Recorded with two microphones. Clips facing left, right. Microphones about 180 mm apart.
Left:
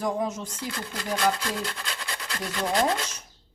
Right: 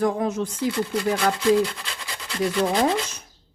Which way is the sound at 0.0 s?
60° right (ahead or behind).